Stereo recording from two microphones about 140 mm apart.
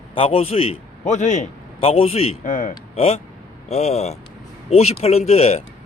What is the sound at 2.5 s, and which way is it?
Speech, 70° left (ahead or behind).